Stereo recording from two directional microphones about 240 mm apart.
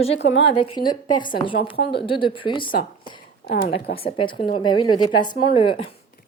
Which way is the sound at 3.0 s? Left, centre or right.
Centre.